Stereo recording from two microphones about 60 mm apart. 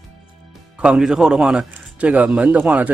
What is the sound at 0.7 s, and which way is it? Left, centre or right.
Speech, centre.